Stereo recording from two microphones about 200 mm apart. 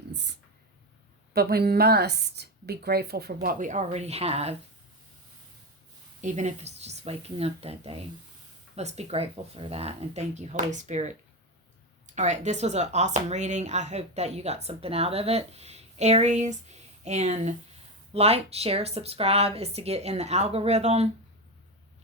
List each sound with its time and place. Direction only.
0.1 s speech: 60° right (ahead or behind)
3.4 s speech: 40° right (ahead or behind)
6.2 s speech: 35° right (ahead or behind)
12.0 s speech: 35° right (ahead or behind)